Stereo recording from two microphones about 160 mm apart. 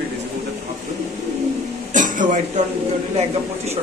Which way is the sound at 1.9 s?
55° right (ahead or behind).